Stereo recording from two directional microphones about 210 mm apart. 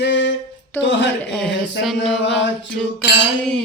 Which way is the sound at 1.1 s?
5° left (ahead or behind).